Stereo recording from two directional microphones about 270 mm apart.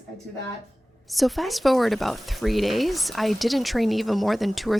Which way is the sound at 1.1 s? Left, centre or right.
Centre.